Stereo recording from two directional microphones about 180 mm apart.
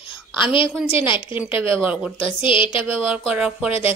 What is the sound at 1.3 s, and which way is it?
Speech, 10° right (ahead or behind).